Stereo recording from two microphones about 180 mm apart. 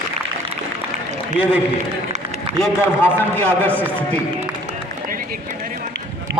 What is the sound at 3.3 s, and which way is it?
Speech, 10° left (ahead or behind).